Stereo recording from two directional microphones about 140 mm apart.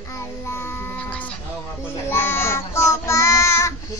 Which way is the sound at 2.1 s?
15° left (ahead or behind).